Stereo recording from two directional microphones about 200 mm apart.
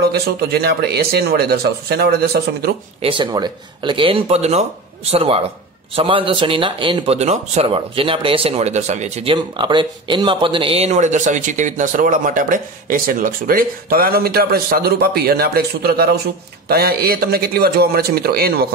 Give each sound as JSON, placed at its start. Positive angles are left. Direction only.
{"t": 0.0, "sound": "speech", "side_deg": -50}
{"t": 3.0, "sound": "speech", "side_deg": -25}